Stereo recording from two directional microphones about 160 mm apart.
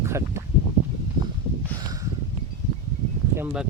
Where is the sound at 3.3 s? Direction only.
10° right (ahead or behind).